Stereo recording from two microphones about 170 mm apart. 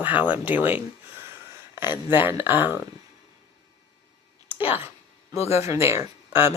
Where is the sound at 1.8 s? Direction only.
25° left (ahead or behind).